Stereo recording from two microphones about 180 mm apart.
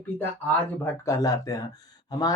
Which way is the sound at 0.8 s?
20° left (ahead or behind).